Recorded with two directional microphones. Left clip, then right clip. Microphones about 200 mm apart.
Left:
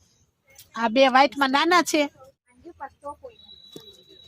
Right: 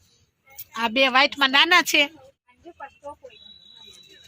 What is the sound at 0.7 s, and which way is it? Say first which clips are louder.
Speech: left 1 dB; 50° left (ahead or behind).